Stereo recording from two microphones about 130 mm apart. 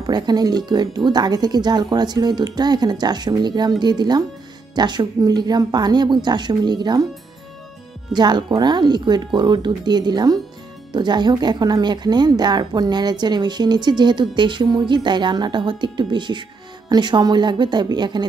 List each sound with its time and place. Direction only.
0.0 s speech: 30° right (ahead or behind)
8.1 s speech: 35° right (ahead or behind)